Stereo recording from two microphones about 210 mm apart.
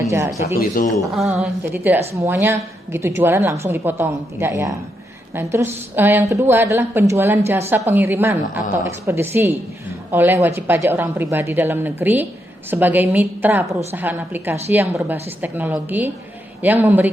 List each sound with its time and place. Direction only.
0.0 s speech: 10° right (ahead or behind)
0.6 s speech: 40° left (ahead or behind)
1.1 s a woman's voice: centre (ahead or behind)